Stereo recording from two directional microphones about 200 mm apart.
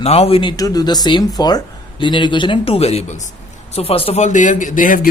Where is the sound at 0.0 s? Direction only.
30° left (ahead or behind).